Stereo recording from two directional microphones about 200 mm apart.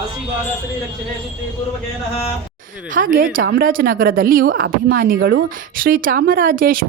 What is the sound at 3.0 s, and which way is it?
Speech, 45° right (ahead or behind).